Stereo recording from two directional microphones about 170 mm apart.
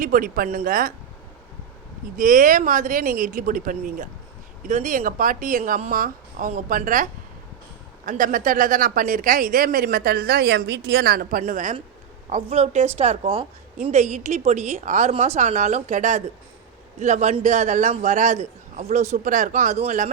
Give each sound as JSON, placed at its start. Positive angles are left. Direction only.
{"t": 0.0, "sound": "speech", "side_deg": -55}
{"t": 2.1, "sound": "a man's voice", "side_deg": -55}